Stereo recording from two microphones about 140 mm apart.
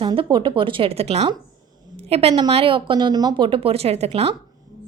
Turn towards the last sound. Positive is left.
turn(degrees=-45)  # may be behind; listen again after turning